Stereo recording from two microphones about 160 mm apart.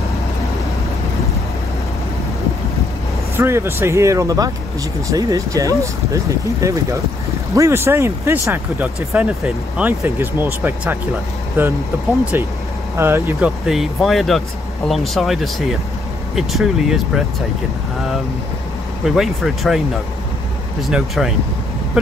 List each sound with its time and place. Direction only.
3.3 s speech: 15° right (ahead or behind)
12.9 s speech: 15° right (ahead or behind)
13.7 s speech: centre (ahead or behind)
19.0 s speech: centre (ahead or behind)
20.8 s speech: centre (ahead or behind)